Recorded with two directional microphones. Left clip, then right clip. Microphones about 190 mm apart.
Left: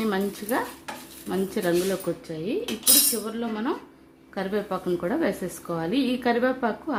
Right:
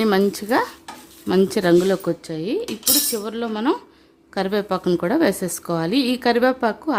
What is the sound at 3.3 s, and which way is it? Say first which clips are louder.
A woman's voice: right 7 dB; 60° right (ahead or behind).